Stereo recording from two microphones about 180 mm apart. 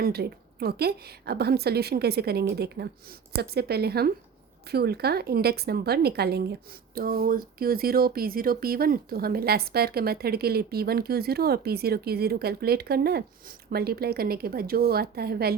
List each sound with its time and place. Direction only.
0.0 s speech: 60° right (ahead or behind)